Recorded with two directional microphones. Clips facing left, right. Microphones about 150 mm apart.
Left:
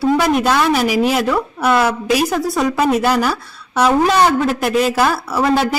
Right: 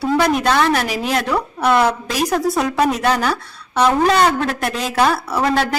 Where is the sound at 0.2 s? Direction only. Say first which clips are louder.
Left 1 dB; centre (ahead or behind).